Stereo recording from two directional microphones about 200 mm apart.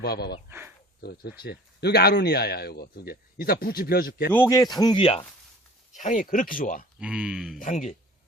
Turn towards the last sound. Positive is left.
turn(degrees=35)  # may be behind; listen again after turning